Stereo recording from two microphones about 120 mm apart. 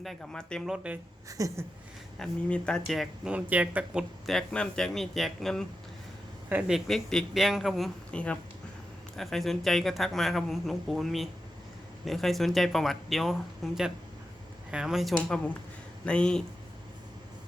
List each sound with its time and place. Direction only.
0.0 s speech: 5° left (ahead or behind)
0.7 s speech: 10° right (ahead or behind)
1.3 s a sound: 30° right (ahead or behind)
2.1 s speech: 5° left (ahead or behind)
3.3 s speech: 10° right (ahead or behind)
4.3 s speech: 5° left (ahead or behind)
8.1 s speech: 10° left (ahead or behind)
15.1 s speech: 10° left (ahead or behind)